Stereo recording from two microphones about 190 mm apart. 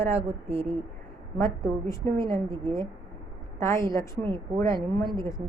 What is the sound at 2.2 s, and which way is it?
Speech, 25° right (ahead or behind).